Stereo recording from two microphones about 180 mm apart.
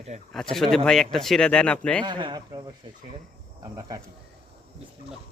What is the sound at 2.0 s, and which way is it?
Speech, 25° right (ahead or behind).